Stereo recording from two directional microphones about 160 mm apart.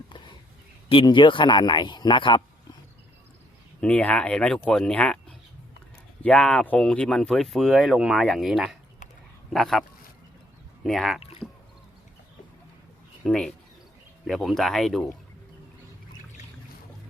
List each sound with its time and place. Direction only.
0.9 s speech: 30° left (ahead or behind)
3.8 s speech: 5° left (ahead or behind)
6.2 s speech: 5° left (ahead or behind)
10.8 s speech: centre (ahead or behind)
11.2 s rowboat: 35° left (ahead or behind)
13.2 s speech: 5° left (ahead or behind)